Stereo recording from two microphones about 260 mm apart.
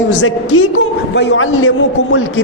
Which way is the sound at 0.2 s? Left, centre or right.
Left.